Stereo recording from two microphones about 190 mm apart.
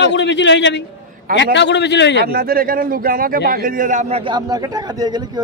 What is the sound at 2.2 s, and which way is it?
A man's voice, 55° right (ahead or behind).